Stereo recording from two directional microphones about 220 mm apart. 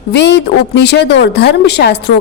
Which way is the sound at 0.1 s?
50° left (ahead or behind).